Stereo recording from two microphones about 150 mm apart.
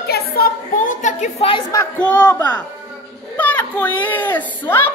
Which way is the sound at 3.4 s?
10° left (ahead or behind).